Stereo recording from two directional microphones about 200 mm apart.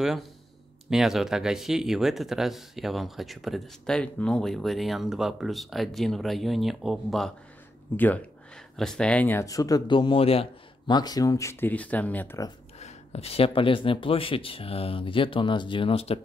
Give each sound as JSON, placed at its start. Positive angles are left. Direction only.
{"t": 0.8, "sound": "speech", "side_deg": 0}
{"t": 12.7, "sound": "speech", "side_deg": 35}